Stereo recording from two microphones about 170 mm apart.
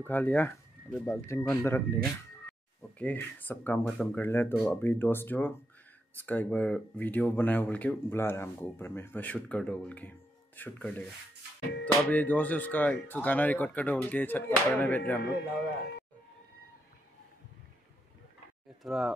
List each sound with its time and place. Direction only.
0.0 s speech: 10° left (ahead or behind)
3.0 s speech: 10° left (ahead or behind)
15.3 s speech: 75° left (ahead or behind)
18.8 s speech: centre (ahead or behind)